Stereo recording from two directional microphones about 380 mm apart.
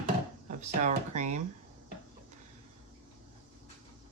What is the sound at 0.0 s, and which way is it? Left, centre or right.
Chopping, centre.